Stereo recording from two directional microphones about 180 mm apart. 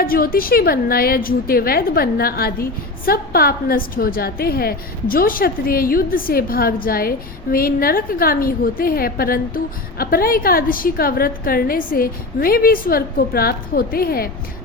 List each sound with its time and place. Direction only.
0.0 s a woman's voice: 55° left (ahead or behind)